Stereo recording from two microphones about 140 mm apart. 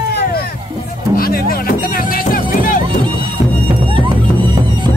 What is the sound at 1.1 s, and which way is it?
Music, 90° left.